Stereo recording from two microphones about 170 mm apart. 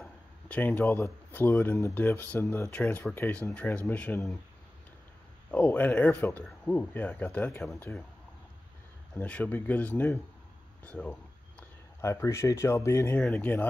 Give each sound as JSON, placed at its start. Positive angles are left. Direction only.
{"t": 0.0, "sound": "speech", "side_deg": 10}
{"t": 5.5, "sound": "speech", "side_deg": 10}
{"t": 9.1, "sound": "speech", "side_deg": 10}